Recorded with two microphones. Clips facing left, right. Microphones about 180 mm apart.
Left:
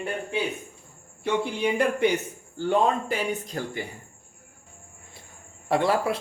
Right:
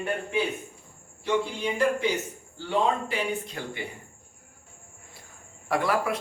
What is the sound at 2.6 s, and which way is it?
Speech, 45° left (ahead or behind).